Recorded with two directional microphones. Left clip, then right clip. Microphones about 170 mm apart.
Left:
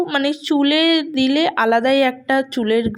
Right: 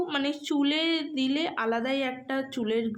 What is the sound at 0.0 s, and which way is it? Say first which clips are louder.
A woman's voice: left 10 dB; 45° left (ahead or behind).